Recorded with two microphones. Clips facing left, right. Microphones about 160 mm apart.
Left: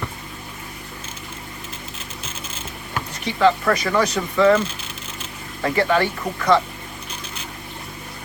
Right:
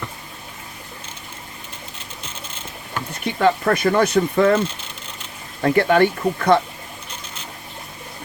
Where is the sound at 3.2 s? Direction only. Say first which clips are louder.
Even; 55° right (ahead or behind).